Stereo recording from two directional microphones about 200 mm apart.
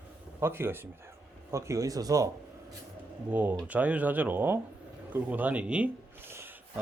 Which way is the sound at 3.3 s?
5° right (ahead or behind).